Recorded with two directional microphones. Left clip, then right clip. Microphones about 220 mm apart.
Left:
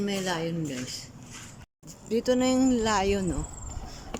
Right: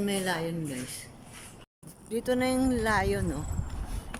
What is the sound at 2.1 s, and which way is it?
Speech, centre (ahead or behind).